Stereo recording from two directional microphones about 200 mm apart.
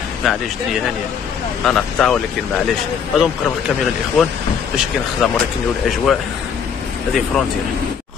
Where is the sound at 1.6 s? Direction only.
5° left (ahead or behind).